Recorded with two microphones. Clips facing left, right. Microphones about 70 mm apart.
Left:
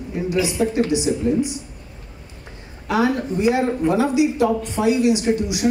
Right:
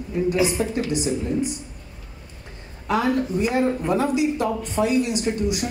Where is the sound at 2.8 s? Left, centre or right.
Right.